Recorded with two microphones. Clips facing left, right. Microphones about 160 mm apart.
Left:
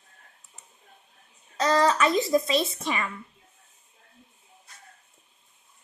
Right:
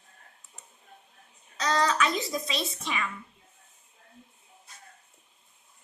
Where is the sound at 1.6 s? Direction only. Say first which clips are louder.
Left 4 dB; 50° left (ahead or behind).